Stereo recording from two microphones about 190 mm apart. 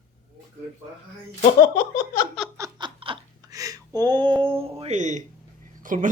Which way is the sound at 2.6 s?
25° right (ahead or behind).